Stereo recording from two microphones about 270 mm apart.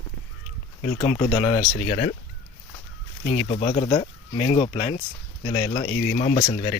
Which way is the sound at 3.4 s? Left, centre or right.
Centre.